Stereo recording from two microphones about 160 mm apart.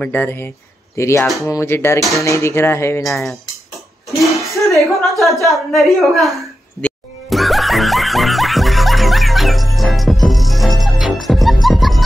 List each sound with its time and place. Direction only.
0.0 s speech: 10° left (ahead or behind)
3.0 s speech: centre (ahead or behind)
4.7 s a sound: centre (ahead or behind)
11.2 s music: centre (ahead or behind)